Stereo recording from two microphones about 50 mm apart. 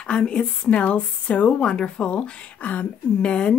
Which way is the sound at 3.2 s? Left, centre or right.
Centre.